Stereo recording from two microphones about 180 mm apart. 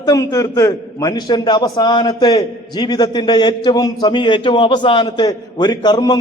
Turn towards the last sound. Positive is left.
turn(degrees=20)  # may be behind; listen again after turning